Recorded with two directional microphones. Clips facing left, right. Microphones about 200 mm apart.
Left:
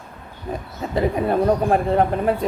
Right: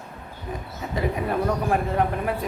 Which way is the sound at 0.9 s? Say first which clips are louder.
Left 6 dB; 30° left (ahead or behind).